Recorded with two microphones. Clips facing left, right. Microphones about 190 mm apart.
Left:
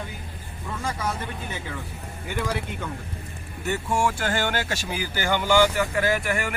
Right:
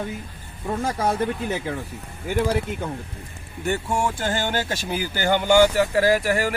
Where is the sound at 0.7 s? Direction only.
50° right (ahead or behind).